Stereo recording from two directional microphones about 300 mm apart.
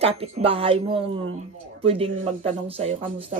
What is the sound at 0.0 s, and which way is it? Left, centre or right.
Speech, centre.